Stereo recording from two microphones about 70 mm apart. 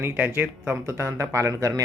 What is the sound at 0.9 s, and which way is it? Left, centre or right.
Speech, right.